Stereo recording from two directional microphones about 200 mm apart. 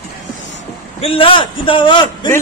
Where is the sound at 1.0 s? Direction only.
25° left (ahead or behind).